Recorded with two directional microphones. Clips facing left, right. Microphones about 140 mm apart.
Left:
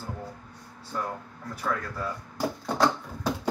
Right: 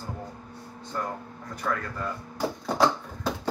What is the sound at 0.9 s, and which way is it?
Speech, 5° left (ahead or behind).